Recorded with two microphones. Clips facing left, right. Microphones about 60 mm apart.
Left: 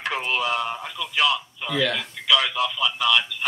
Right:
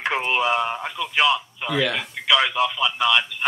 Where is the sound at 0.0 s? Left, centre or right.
Right.